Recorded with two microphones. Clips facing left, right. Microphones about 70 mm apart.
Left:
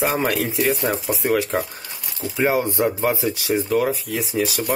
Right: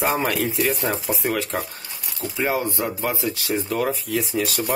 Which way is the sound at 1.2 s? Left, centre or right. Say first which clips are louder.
Left 5 dB; centre.